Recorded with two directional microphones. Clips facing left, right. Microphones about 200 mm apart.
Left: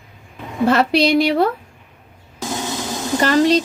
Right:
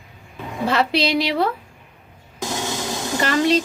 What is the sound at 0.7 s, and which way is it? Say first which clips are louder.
Speech: left 5 dB; 50° left (ahead or behind).